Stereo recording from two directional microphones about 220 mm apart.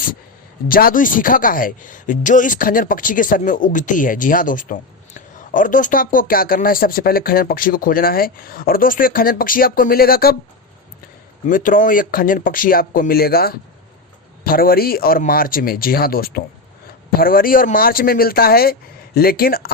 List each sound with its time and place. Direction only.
0.7 s speech: 40° left (ahead or behind)
11.4 s speech: 40° left (ahead or behind)